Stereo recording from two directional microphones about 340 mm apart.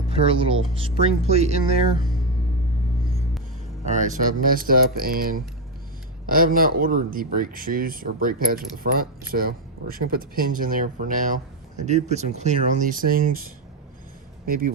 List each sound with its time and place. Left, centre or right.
0.1 s speech: centre
3.8 s speech: right